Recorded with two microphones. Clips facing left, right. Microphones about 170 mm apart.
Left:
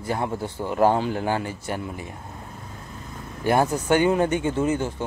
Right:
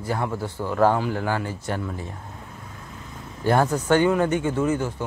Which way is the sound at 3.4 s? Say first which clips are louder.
Even; 15° left (ahead or behind).